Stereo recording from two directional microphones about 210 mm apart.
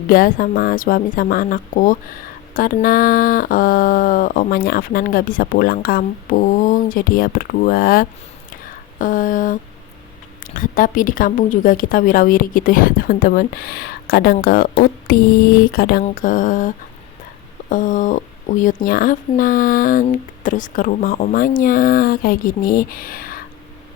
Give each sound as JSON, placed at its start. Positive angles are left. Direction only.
{"t": 0.1, "sound": "speech", "side_deg": 45}